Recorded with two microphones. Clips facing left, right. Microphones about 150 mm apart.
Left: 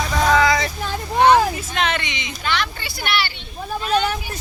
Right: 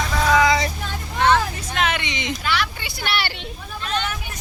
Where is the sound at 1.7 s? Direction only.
5° right (ahead or behind).